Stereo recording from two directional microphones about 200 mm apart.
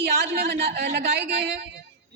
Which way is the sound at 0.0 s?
55° right (ahead or behind).